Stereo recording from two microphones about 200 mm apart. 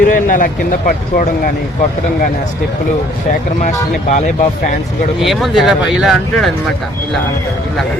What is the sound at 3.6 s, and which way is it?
Speech, 35° left (ahead or behind).